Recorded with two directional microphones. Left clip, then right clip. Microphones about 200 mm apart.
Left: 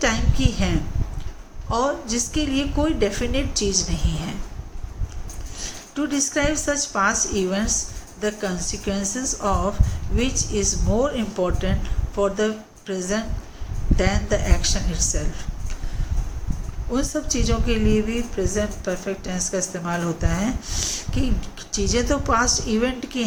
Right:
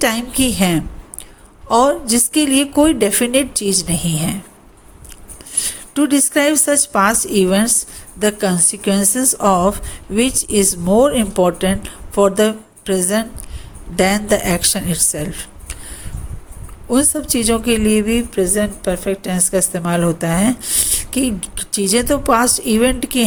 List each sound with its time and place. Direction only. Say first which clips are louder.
0.0 s a woman's voice: right 6 dB; 55° right (ahead or behind)
5.6 s a woman's voice: right 9 dB; 50° right (ahead or behind)
16.9 s a woman's voice: right 7 dB; 50° right (ahead or behind)